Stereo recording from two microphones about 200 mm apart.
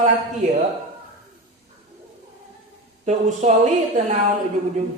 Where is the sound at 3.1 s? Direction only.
35° right (ahead or behind).